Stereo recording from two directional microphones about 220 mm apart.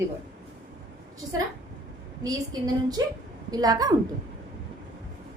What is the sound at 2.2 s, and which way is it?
A woman's voice, 15° right (ahead or behind).